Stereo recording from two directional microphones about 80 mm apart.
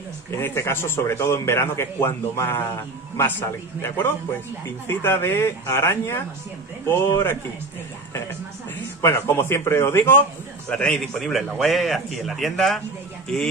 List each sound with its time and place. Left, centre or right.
0.4 s a man's voice: left
9.0 s a man's voice: left
10.7 s a man's voice: centre